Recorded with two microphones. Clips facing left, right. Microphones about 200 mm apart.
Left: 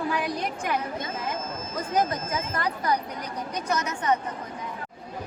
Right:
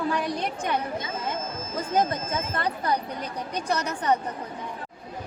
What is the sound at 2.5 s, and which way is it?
A woman's voice, 30° right (ahead or behind).